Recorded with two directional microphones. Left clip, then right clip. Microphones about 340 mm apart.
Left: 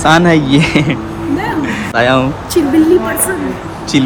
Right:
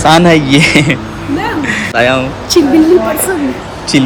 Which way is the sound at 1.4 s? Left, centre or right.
Centre.